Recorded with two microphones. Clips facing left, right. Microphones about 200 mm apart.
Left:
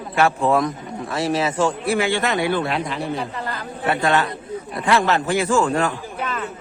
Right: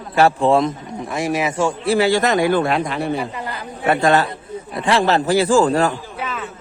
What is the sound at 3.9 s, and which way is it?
Speech, 40° right (ahead or behind).